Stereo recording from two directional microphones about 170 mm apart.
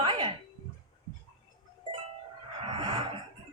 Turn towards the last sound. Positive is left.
turn(degrees=-30)  # may be behind; listen again after turning